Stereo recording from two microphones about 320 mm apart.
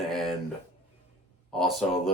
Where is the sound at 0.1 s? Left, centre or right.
Centre.